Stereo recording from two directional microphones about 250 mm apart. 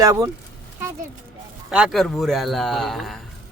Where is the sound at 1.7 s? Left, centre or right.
Centre.